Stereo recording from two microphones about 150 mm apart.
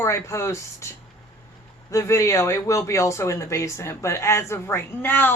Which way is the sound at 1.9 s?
20° left (ahead or behind).